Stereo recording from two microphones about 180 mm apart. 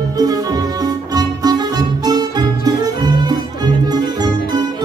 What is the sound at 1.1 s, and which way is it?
Music, 20° right (ahead or behind).